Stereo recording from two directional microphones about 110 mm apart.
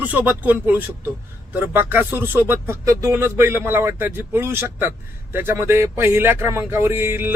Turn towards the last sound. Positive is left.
turn(degrees=-20)  # may be behind; listen again after turning